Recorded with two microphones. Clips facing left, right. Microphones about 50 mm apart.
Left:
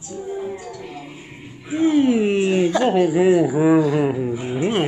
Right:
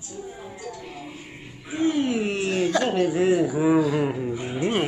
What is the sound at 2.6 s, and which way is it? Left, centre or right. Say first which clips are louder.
Speech: left 2 dB; centre.